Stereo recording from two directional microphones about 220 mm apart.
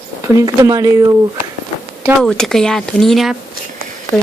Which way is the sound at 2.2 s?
Centre (ahead or behind).